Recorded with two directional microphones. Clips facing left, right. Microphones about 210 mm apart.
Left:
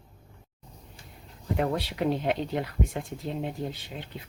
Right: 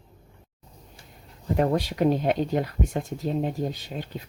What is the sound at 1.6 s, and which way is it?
Speech, 45° right (ahead or behind).